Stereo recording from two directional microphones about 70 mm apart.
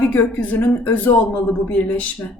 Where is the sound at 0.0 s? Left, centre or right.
Left.